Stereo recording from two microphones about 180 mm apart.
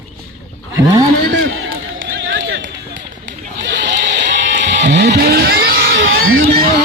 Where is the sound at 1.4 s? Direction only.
90° right.